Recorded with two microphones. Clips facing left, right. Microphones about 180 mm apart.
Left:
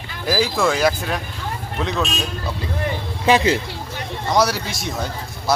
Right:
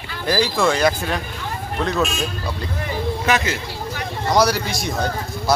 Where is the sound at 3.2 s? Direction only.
30° left (ahead or behind).